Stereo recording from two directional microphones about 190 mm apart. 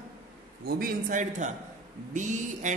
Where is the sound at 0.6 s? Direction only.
50° right (ahead or behind).